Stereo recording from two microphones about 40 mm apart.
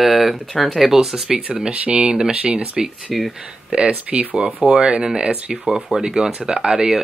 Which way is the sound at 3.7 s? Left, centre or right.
Right.